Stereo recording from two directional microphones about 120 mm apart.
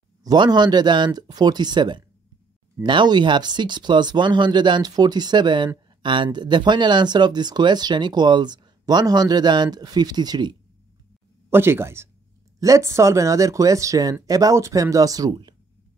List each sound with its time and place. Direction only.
0.2 s speech: 35° right (ahead or behind)
11.5 s speech: 20° right (ahead or behind)